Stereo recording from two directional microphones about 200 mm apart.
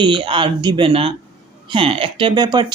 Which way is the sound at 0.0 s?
25° right (ahead or behind).